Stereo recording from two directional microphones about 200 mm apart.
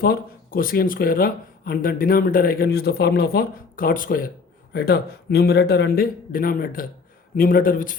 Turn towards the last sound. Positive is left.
turn(degrees=45)  # may be behind; listen again after turning